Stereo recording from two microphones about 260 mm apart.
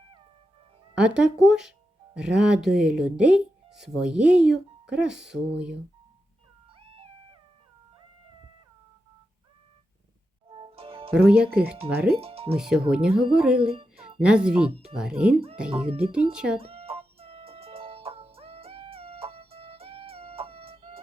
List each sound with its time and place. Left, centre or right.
0.9 s speech: centre
6.7 s cat: right
10.5 s music: right
11.1 s speech: centre
12.2 s speech: right
12.5 s speech: centre
15.7 s a child's voice: right
16.3 s speech: centre
16.6 s chicken: right